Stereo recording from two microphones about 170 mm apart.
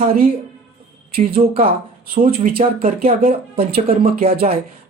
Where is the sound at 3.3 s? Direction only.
35° right (ahead or behind).